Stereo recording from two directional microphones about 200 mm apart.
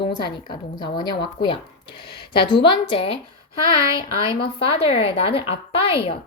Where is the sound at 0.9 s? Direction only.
20° left (ahead or behind).